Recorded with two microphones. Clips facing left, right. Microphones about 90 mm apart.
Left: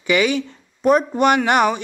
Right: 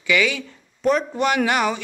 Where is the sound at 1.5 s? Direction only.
20° left (ahead or behind).